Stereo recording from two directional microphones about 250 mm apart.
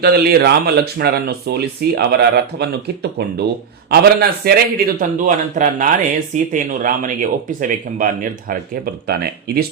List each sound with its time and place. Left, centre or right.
0.0 s speech: right